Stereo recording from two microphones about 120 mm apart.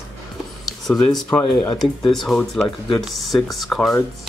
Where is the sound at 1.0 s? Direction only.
10° left (ahead or behind).